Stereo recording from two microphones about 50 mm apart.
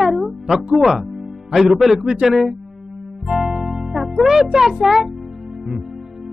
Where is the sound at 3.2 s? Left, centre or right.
Centre.